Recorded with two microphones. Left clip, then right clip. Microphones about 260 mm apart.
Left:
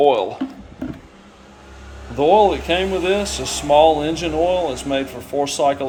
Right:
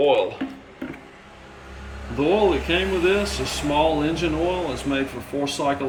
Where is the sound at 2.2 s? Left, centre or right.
Centre.